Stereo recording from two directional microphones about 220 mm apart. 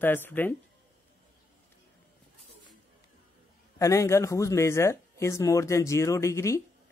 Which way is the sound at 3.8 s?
15° left (ahead or behind).